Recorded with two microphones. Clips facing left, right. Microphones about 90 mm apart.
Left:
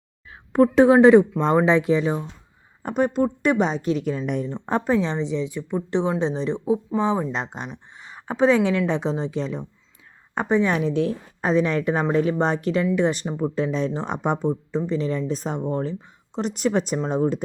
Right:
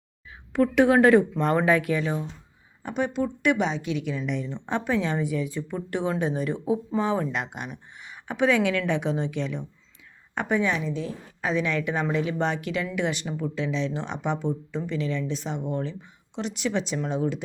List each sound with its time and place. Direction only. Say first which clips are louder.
0.3 s a sound: left 6 dB; 35° left (ahead or behind)
0.9 s speech: left 5 dB; 20° left (ahead or behind)
2.8 s speech: left 5 dB; 45° left (ahead or behind)
10.7 s a woman's voice: left 6 dB; 60° left (ahead or behind)
11.3 s speech: left 5 dB; 35° left (ahead or behind)